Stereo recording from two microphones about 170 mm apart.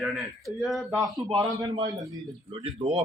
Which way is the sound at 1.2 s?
30° right (ahead or behind).